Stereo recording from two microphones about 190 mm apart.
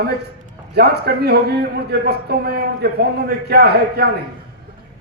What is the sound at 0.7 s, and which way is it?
A man's voice, 55° right (ahead or behind).